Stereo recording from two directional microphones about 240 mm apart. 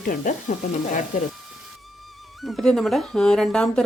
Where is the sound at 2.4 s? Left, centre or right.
Centre.